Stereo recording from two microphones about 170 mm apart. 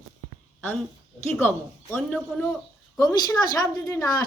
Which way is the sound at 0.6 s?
10° left (ahead or behind).